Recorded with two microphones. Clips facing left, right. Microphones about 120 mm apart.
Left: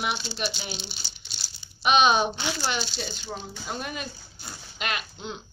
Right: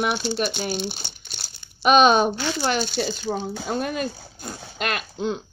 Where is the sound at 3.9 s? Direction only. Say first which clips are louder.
Right 8 dB; 45° right (ahead or behind).